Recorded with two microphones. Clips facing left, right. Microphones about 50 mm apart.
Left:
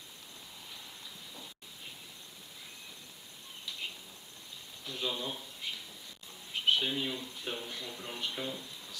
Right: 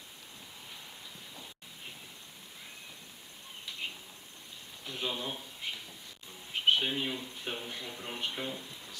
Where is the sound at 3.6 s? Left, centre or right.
Right.